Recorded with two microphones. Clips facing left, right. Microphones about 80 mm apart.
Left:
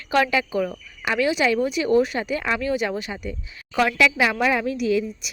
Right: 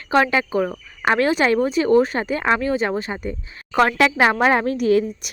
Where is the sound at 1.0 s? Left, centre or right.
Right.